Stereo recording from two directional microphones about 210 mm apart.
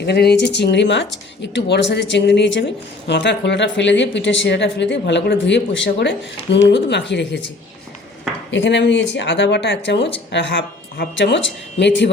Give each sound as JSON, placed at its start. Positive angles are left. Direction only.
{"t": 0.0, "sound": "a woman's voice", "side_deg": 50}
{"t": 8.4, "sound": "a woman's voice", "side_deg": 60}